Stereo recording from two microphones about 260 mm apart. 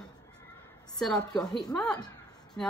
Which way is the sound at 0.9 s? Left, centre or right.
Centre.